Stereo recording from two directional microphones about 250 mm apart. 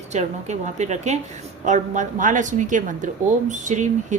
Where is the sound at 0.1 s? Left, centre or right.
Right.